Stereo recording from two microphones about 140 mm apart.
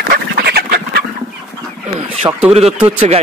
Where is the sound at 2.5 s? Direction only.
45° right (ahead or behind).